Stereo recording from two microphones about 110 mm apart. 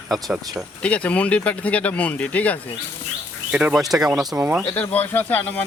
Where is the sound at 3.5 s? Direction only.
10° right (ahead or behind).